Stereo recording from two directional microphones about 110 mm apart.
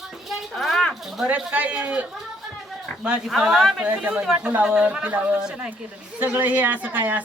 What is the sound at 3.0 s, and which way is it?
Speech, 10° right (ahead or behind).